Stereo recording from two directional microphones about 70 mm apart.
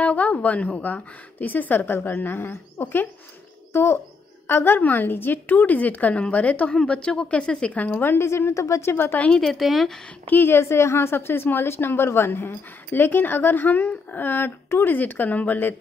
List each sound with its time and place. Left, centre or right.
0.0 s a woman's voice: centre; by 8.9 s left
8.9 s a woman's voice: left
9.3 s speech: centre
10.2 s a woman's voice: left